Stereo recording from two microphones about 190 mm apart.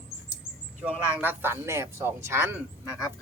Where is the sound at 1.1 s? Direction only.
10° right (ahead or behind).